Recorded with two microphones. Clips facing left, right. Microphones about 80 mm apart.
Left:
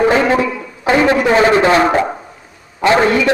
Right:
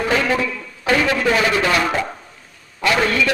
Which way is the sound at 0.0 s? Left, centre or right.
Left.